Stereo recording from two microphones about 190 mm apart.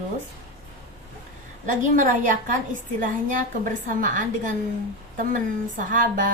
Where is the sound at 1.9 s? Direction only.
45° right (ahead or behind).